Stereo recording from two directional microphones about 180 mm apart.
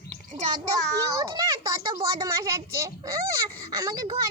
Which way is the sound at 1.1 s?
20° right (ahead or behind).